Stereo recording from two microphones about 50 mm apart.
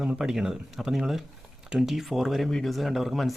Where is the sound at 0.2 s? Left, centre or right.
Centre.